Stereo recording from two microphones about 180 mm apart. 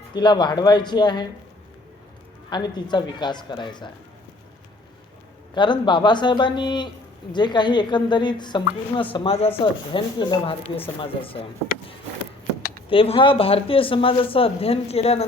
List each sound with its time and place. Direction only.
0.1 s speech: 25° left (ahead or behind)
2.5 s speech: 25° left (ahead or behind)
5.5 s speech: 25° left (ahead or behind)
12.9 s speech: 30° left (ahead or behind)